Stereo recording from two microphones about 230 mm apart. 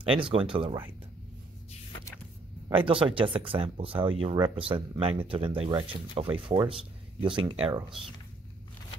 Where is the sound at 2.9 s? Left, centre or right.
Right.